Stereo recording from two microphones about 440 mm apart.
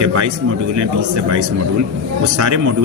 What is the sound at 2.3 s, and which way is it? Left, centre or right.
Speech, right.